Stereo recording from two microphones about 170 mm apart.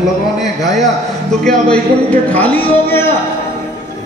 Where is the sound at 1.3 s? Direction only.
5° left (ahead or behind).